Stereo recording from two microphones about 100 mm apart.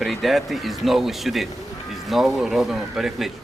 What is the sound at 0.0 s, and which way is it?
Speech, centre (ahead or behind).